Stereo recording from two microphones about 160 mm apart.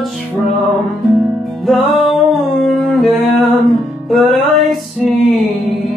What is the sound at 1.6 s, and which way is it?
Music, centre (ahead or behind).